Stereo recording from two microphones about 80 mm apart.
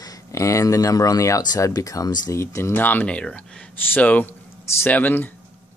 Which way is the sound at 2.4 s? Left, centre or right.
Left.